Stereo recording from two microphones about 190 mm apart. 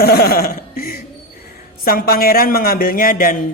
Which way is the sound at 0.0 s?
55° left (ahead or behind).